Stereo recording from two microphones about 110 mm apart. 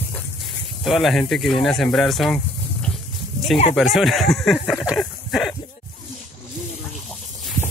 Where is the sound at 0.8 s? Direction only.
Centre (ahead or behind).